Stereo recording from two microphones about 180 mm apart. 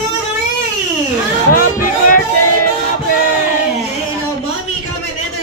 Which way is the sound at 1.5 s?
50° left (ahead or behind).